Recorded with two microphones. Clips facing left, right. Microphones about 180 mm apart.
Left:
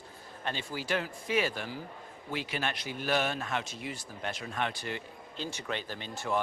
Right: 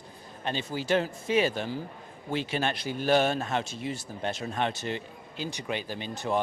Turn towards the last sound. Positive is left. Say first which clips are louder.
# right 4 dB
turn(degrees=-20)  # may be behind; listen again after turning